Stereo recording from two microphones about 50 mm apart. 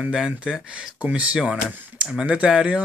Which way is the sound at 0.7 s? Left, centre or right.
Right.